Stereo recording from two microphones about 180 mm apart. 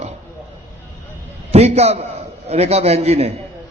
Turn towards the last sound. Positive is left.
turn(degrees=-35)  # may be behind; listen again after turning